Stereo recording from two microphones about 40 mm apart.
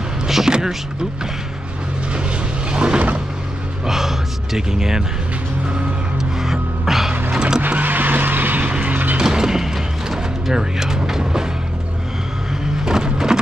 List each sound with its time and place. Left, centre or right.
0.5 s speech: centre
2.7 s vehicle: right
3.8 s gasp: centre
6.4 s music: centre
7.3 s vehicle: right
7.6 s vehicle: right
8.6 s music: right
9.2 s a sound: centre
12.8 s a sound: centre